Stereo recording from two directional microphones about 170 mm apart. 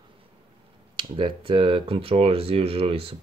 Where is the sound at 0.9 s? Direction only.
30° right (ahead or behind).